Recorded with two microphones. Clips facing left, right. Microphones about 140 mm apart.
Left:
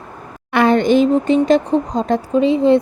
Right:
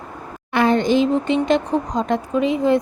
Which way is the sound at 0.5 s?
70° left (ahead or behind).